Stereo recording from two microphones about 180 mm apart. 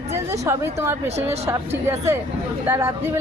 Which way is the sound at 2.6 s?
10° right (ahead or behind).